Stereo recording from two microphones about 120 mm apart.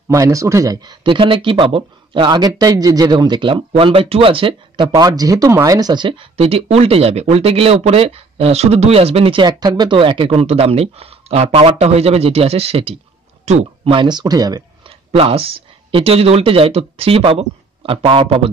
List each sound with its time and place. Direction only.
0.1 s speech: 25° right (ahead or behind)
1.0 s speech: 45° right (ahead or behind)
14.9 s speech: 55° right (ahead or behind)